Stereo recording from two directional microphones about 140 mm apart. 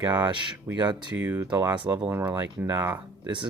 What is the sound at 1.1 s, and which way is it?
Speech, 15° right (ahead or behind).